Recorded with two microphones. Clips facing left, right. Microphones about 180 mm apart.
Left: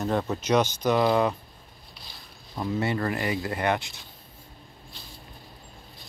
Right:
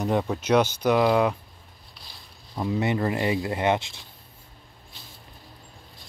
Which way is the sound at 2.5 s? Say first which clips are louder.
Right 2 dB; 15° right (ahead or behind).